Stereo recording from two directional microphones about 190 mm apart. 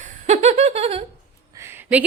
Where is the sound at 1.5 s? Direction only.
10° right (ahead or behind).